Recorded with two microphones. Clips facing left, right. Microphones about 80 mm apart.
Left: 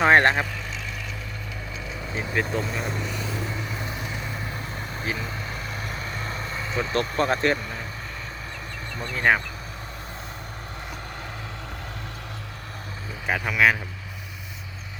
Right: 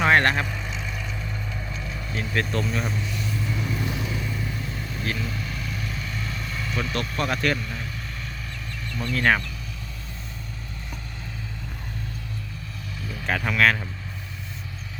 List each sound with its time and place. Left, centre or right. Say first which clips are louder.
0.0 s speech: left 2 dB; left
1.9 s speech: left 1 dB; centre
5.1 s vehicle: right 1 dB; left
9.0 s speech: even; centre
13.2 s speech: even; centre